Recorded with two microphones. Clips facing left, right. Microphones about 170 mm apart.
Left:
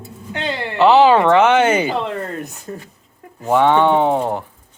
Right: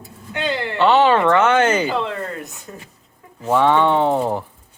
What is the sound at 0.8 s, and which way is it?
Speech, 10° left (ahead or behind).